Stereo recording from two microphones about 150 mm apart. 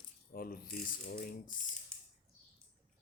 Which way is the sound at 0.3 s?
75° left (ahead or behind).